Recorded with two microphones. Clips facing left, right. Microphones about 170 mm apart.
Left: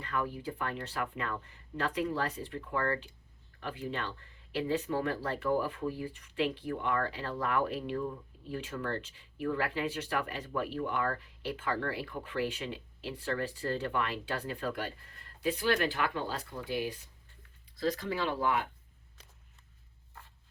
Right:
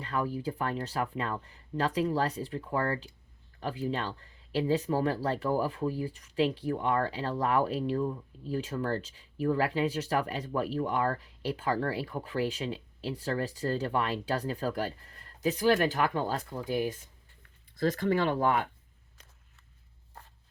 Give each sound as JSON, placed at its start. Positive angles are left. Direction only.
{"t": 0.0, "sound": "speech", "side_deg": -35}